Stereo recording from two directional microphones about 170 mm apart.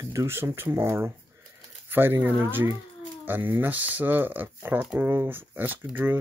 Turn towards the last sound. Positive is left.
turn(degrees=-10)  # may be behind; listen again after turning